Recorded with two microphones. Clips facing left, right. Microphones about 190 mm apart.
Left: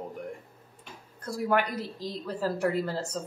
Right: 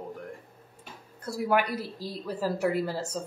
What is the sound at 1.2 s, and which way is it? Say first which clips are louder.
A woman's voice: right 1 dB; 5° right (ahead or behind).